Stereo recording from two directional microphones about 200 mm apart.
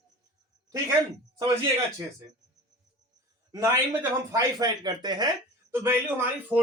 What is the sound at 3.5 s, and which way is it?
A man's voice, 15° right (ahead or behind).